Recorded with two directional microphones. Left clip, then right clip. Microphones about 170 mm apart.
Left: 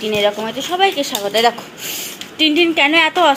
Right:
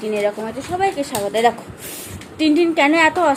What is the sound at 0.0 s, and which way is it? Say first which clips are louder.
A woman's voice: left 4 dB; centre (ahead or behind).